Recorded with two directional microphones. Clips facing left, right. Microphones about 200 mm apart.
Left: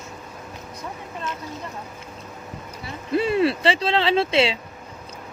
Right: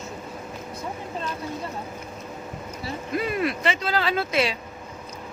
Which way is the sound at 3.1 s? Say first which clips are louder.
Left 6 dB; 30° left (ahead or behind).